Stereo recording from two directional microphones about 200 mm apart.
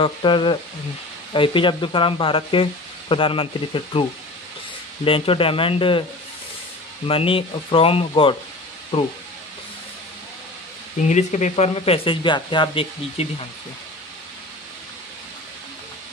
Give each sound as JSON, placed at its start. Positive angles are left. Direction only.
{"t": 0.0, "sound": "speech", "side_deg": 25}
{"t": 5.0, "sound": "speech", "side_deg": 25}
{"t": 7.1, "sound": "speech", "side_deg": 25}
{"t": 11.1, "sound": "speech", "side_deg": 35}